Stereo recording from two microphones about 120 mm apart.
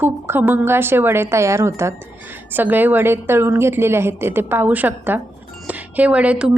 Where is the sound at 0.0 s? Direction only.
15° right (ahead or behind).